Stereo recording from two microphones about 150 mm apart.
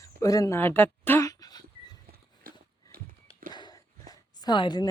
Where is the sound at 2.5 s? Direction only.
70° right (ahead or behind).